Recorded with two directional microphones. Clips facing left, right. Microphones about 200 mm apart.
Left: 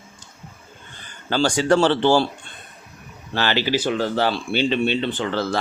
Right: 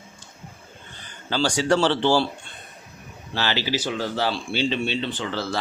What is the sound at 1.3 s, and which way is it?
Speech, 50° left (ahead or behind).